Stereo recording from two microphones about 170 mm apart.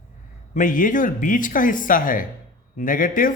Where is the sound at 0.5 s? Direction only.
50° left (ahead or behind).